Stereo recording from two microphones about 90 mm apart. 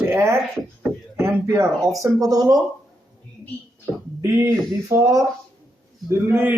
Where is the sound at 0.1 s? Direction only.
30° right (ahead or behind).